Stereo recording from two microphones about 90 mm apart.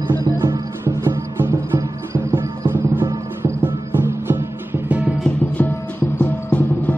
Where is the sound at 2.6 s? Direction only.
25° right (ahead or behind).